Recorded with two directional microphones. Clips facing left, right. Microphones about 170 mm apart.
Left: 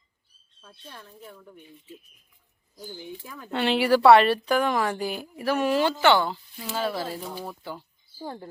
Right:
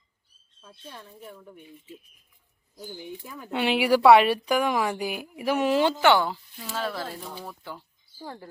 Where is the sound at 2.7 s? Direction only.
10° right (ahead or behind).